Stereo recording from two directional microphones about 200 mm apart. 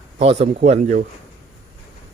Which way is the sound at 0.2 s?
30° right (ahead or behind).